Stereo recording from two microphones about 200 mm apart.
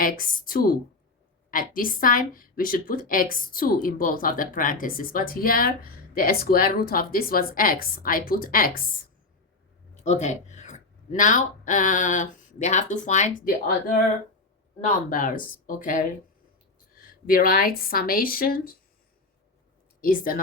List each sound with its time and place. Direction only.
0.0 s a woman's voice: 45° left (ahead or behind)
9.9 s speech: 35° left (ahead or behind)
15.1 s a woman's voice: 45° left (ahead or behind)
20.0 s a woman's voice: 45° left (ahead or behind)